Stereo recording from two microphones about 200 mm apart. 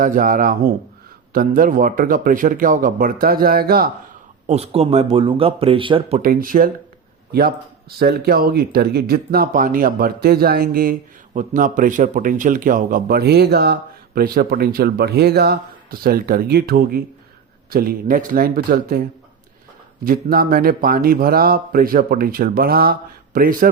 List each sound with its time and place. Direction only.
0.0 s speech: 45° right (ahead or behind)
4.4 s speech: 30° right (ahead or behind); by 19.0 s 45° right (ahead or behind)
20.1 s speech: 45° right (ahead or behind)